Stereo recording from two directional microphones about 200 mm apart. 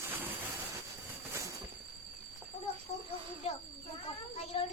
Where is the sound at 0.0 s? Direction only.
10° right (ahead or behind).